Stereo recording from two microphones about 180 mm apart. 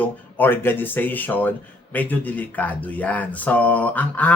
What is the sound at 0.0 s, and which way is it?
Speech, 10° left (ahead or behind).